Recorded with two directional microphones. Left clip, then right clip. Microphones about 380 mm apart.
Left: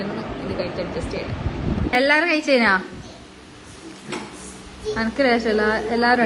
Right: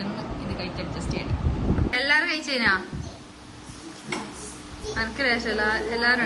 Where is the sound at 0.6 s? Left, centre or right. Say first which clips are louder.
Left 7 dB; centre.